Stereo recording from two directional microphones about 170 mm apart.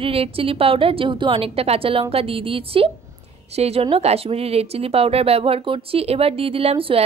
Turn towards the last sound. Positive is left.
turn(degrees=-35)  # may be behind; listen again after turning